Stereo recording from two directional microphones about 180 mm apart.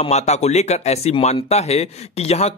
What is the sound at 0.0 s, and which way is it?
Speech, 40° left (ahead or behind).